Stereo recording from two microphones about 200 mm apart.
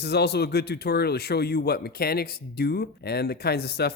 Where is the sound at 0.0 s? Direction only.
55° left (ahead or behind).